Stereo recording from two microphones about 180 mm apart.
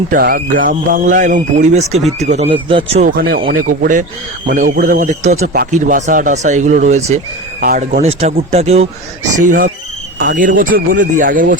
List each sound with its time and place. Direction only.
0.1 s speech: 55° right (ahead or behind); by 3.1 s 35° right (ahead or behind)
3.2 s speech: 60° right (ahead or behind); by 7.2 s 40° right (ahead or behind)
7.6 s speech: 55° right (ahead or behind)
8.4 s speech: 35° right (ahead or behind)
9.4 s speech: 45° right (ahead or behind)